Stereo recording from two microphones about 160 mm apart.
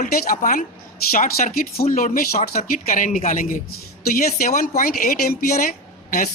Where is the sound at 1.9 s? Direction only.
55° left (ahead or behind).